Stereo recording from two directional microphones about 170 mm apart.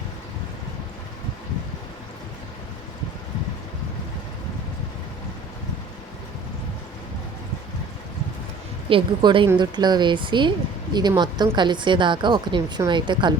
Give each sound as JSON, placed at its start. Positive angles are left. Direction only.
{"t": 8.9, "sound": "a woman's voice", "side_deg": -30}